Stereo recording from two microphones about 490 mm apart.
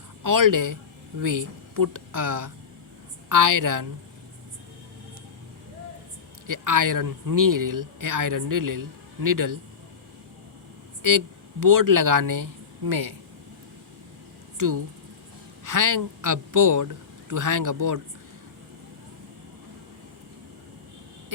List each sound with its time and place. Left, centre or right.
0.2 s speech: right
6.5 s speech: right
11.0 s speech: right
14.6 s a man's voice: right